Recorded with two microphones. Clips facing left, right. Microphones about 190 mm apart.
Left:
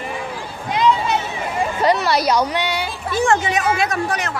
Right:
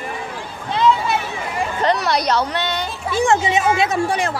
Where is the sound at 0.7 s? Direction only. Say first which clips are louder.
Even; 15° left (ahead or behind).